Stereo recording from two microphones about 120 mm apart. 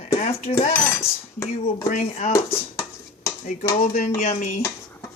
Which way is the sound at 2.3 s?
25° left (ahead or behind).